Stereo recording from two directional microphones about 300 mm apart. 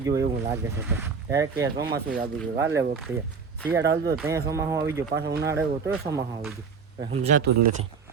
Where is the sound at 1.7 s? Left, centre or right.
Right.